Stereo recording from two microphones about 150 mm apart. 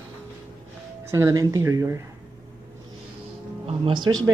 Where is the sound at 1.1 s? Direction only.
25° right (ahead or behind).